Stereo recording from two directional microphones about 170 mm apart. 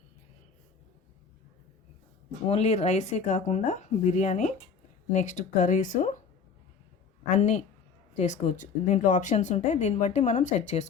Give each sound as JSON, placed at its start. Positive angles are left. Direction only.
{"t": 2.5, "sound": "speech", "side_deg": 40}
{"t": 7.3, "sound": "speech", "side_deg": 45}